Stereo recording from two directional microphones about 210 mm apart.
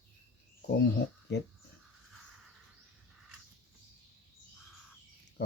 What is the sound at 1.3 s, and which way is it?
Speech, 55° left (ahead or behind).